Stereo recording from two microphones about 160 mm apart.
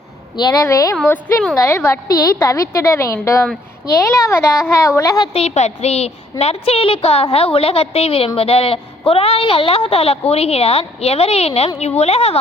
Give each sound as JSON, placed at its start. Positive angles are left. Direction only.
{"t": 0.3, "sound": "a child's voice", "side_deg": 25}
{"t": 5.3, "sound": "a woman's voice", "side_deg": 40}